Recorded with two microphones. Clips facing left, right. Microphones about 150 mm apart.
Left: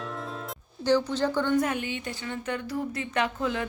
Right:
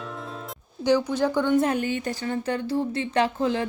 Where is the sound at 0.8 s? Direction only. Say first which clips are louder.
Right 2 dB; 15° right (ahead or behind).